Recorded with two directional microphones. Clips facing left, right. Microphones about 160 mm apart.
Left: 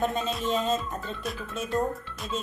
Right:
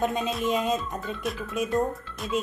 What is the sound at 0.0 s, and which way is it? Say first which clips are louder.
Music: right 2 dB; 15° right (ahead or behind).